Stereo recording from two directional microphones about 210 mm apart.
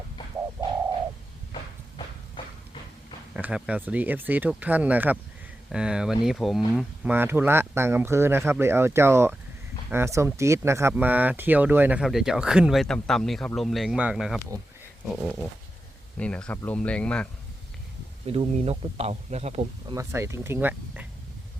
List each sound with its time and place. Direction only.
3.3 s speech: 5° right (ahead or behind)
18.3 s speech: 30° right (ahead or behind)
19.9 s speech: 15° right (ahead or behind)